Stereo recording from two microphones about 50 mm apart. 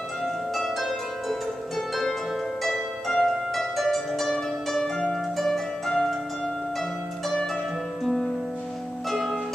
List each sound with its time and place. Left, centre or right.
0.2 s pizzicato: centre
2.6 s harp: centre
8.0 s music: centre
9.1 s harp: centre